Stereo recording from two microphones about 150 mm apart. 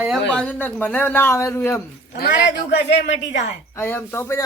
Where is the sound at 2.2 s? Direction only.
90° left.